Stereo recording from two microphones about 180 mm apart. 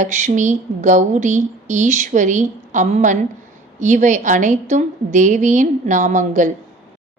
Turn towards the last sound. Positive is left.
turn(degrees=-45)  # may be behind; listen again after turning